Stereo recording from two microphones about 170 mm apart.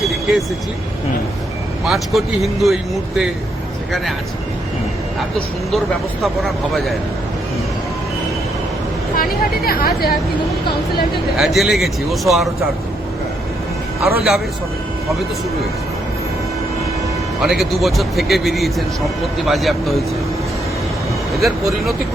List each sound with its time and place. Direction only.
0.0 s vehicle: centre (ahead or behind)
1.8 s speech: centre (ahead or behind)
6.2 s speech: centre (ahead or behind)
9.1 s speech: 60° left (ahead or behind)
11.3 s speech: centre (ahead or behind)
14.0 s speech: centre (ahead or behind)
17.4 s speech: centre (ahead or behind)